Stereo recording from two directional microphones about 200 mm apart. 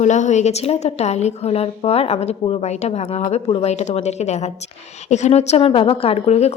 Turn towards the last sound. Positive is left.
turn(degrees=30)  # may be behind; listen again after turning